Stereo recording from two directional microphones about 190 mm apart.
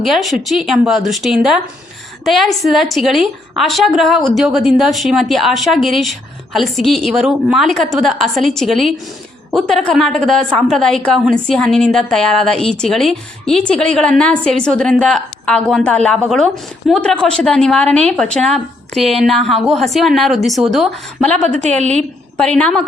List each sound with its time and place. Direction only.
0.0 s a woman's voice: centre (ahead or behind)
21.7 s a woman's voice: 35° right (ahead or behind)
22.4 s a woman's voice: 5° left (ahead or behind)